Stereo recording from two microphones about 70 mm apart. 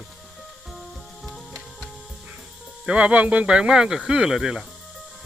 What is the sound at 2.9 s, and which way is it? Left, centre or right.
Speech, centre.